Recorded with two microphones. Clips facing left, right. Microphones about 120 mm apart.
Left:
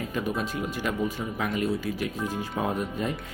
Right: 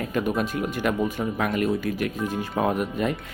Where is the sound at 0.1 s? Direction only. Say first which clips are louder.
Right 6 dB; 60° right (ahead or behind).